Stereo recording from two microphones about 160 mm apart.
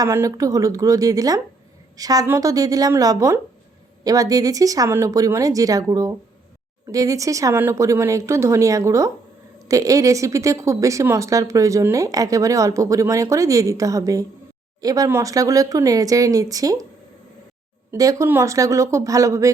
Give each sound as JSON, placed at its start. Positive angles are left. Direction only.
{"t": 0.0, "sound": "a woman's voice", "side_deg": -20}
{"t": 17.9, "sound": "a woman's voice", "side_deg": -20}